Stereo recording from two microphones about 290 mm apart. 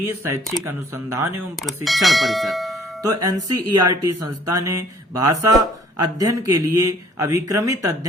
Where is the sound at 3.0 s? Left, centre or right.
Centre.